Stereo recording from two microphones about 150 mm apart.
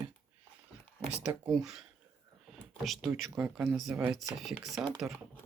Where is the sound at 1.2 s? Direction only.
5° right (ahead or behind).